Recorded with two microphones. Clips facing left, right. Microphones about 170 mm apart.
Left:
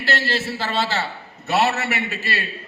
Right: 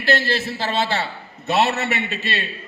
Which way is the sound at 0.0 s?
15° right (ahead or behind).